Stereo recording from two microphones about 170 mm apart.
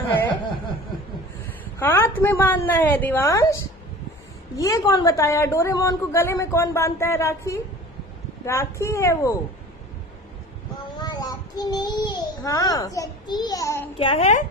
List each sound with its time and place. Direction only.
1.8 s a woman's voice: 15° left (ahead or behind)
11.0 s a child's voice: 25° left (ahead or behind)
13.9 s a woman's voice: 35° left (ahead or behind)